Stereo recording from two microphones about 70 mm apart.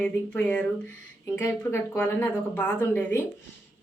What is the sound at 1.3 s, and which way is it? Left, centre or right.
Speech, left.